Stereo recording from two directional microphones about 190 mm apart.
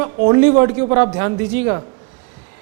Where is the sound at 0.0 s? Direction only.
20° right (ahead or behind).